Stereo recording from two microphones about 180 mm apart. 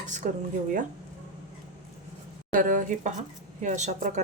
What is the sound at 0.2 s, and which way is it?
Speech, 40° right (ahead or behind).